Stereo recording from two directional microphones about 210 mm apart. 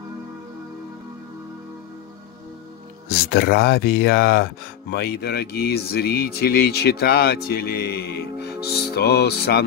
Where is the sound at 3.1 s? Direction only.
50° left (ahead or behind).